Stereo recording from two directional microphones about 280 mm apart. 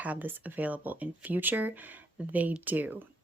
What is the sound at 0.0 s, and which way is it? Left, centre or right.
Speech, centre.